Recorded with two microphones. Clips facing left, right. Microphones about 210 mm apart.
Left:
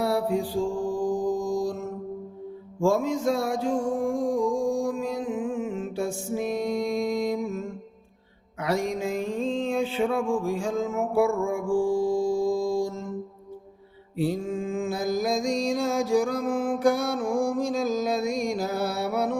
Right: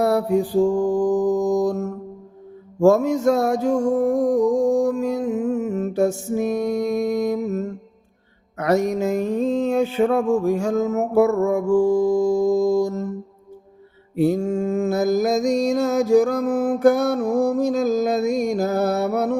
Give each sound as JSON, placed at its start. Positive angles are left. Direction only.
{"t": 0.0, "sound": "mantra", "side_deg": -45}
{"t": 0.3, "sound": "mantra", "side_deg": -70}
{"t": 0.9, "sound": "mantra", "side_deg": -45}
{"t": 6.3, "sound": "music", "side_deg": -45}
{"t": 8.5, "sound": "mantra", "side_deg": -45}
{"t": 10.8, "sound": "music", "side_deg": -40}
{"t": 11.4, "sound": "mantra", "side_deg": -40}
{"t": 14.2, "sound": "mantra", "side_deg": -45}